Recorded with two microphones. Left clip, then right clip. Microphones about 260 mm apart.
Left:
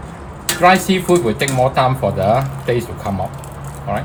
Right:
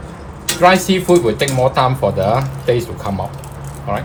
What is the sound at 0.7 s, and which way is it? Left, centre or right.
Speech, centre.